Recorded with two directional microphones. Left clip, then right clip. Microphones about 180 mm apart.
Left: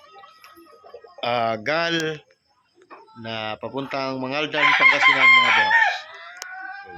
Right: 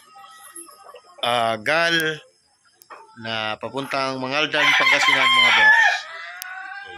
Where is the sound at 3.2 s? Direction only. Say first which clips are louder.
Right 3 dB; 5° left (ahead or behind).